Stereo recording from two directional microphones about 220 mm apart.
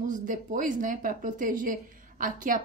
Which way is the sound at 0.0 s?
35° right (ahead or behind).